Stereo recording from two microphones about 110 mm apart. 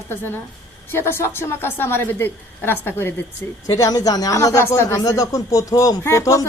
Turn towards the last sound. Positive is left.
turn(degrees=30)  # may be behind; listen again after turning